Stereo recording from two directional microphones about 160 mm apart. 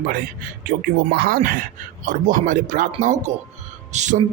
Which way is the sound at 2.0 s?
60° right (ahead or behind).